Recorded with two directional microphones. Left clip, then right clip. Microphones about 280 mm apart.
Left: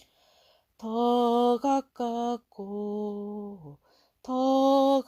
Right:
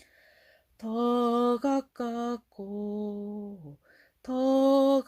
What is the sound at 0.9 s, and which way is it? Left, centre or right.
Mantra, centre.